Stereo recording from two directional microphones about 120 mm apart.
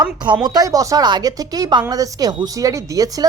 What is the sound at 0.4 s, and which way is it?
Speech, 30° right (ahead or behind).